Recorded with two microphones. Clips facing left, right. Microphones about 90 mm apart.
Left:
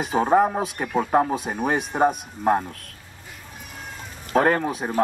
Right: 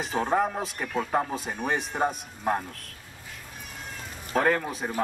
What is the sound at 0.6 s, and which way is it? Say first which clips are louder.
Speech: left 6 dB; 5° left (ahead or behind).